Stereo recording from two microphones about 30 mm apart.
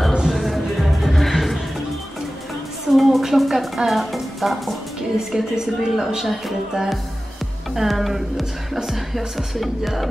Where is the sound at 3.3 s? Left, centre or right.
Centre.